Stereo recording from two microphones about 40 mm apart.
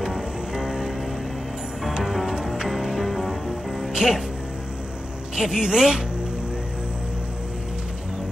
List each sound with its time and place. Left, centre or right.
0.1 s music: centre
2.0 s music: centre
2.3 s music: centre
2.7 s music: centre
3.9 s music: centre
5.3 s a woman's voice: centre